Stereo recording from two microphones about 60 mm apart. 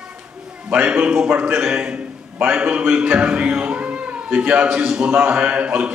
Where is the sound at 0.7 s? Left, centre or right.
Right.